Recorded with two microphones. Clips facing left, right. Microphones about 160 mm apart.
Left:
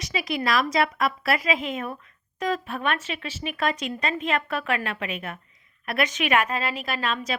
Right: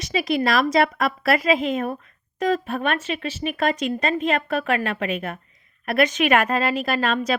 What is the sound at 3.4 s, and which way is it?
Speech, 35° right (ahead or behind).